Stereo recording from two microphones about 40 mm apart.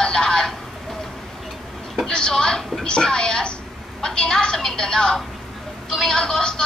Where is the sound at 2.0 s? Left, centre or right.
Centre.